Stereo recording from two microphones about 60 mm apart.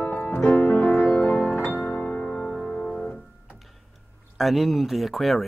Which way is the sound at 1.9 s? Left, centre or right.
Centre.